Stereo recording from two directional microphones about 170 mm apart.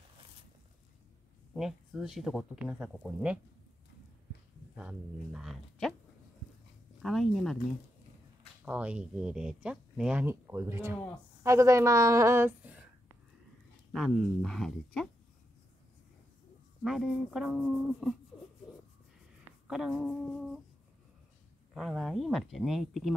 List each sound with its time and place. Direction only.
1.5 s speech: centre (ahead or behind)
4.7 s speech: 5° right (ahead or behind)
7.0 s speech: centre (ahead or behind)
8.6 s speech: 5° right (ahead or behind)
13.9 s speech: centre (ahead or behind)
16.8 s speech: centre (ahead or behind)
19.7 s speech: centre (ahead or behind)
21.7 s speech: centre (ahead or behind)